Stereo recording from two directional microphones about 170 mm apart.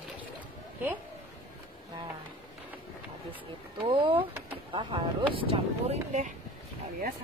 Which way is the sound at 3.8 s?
30° right (ahead or behind).